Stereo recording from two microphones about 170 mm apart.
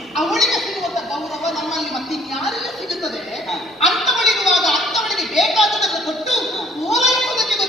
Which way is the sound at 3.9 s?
Centre (ahead or behind).